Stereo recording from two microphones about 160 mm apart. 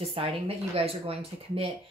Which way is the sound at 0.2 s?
35° right (ahead or behind).